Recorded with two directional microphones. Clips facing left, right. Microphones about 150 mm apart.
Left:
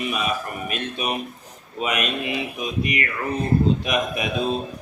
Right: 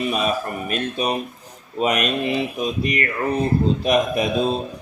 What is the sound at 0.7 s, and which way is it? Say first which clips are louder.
A man's voice: right 4 dB; 35° right (ahead or behind).